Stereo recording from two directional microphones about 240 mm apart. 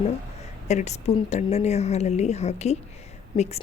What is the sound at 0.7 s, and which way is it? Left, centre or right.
A woman's voice, left.